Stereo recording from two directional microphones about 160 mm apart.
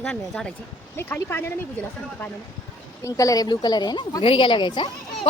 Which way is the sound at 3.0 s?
20° left (ahead or behind).